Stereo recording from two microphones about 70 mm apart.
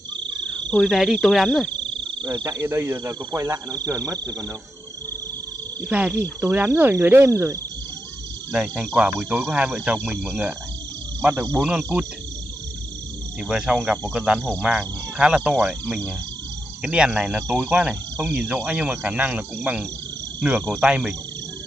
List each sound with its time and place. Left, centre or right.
0.8 s speech: centre
2.2 s cricket: right
2.6 s cricket: right
3.5 s speech: right
5.9 s speech: right
6.4 s cricket: right
8.5 s speech: centre
11.5 s speech: centre
13.4 s speech: centre
16.8 s speech: centre